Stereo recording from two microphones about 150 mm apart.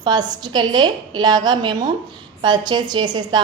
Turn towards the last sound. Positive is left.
turn(degrees=-30)  # may be behind; listen again after turning